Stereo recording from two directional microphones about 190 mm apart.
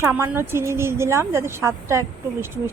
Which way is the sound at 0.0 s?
10° right (ahead or behind).